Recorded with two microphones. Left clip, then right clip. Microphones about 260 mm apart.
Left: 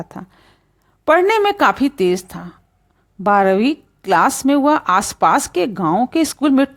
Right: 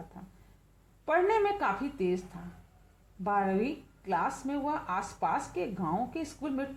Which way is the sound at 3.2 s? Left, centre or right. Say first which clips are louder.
Left 16 dB; left.